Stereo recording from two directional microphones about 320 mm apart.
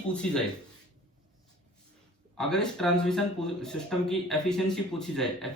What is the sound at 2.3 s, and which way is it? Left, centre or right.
Speech, centre.